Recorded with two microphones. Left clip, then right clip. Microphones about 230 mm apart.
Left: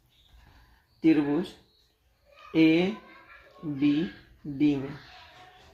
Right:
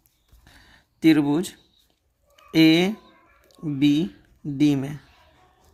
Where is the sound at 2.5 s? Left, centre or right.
Right.